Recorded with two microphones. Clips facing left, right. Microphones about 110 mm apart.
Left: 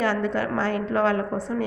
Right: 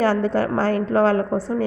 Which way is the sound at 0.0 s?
35° right (ahead or behind).